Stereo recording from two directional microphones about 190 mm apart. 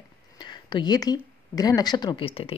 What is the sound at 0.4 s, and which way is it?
Speech, 25° left (ahead or behind).